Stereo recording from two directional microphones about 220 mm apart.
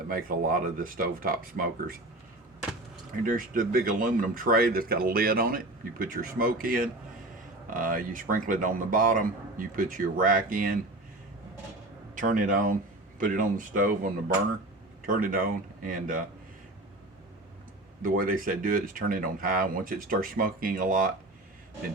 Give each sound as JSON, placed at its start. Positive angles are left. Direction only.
{"t": 0.1, "sound": "speech", "side_deg": -40}
{"t": 3.1, "sound": "speech", "side_deg": -40}
{"t": 12.1, "sound": "speech", "side_deg": -35}
{"t": 18.0, "sound": "speech", "side_deg": -40}